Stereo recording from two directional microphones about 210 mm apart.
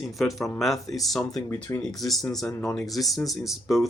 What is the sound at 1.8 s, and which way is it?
Speech, centre (ahead or behind).